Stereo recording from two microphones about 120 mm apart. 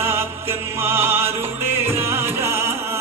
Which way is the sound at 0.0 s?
20° right (ahead or behind).